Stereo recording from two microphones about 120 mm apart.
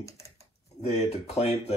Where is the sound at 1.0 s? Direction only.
60° left (ahead or behind).